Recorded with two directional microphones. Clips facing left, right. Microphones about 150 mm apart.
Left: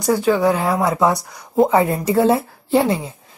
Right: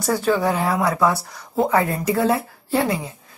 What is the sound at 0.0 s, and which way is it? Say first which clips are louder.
Speech: left 4 dB; 15° left (ahead or behind).